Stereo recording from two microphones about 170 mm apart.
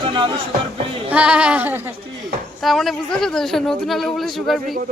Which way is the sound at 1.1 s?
5° right (ahead or behind).